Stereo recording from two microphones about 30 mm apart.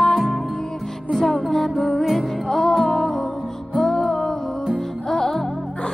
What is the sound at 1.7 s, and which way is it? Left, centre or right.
Music, centre.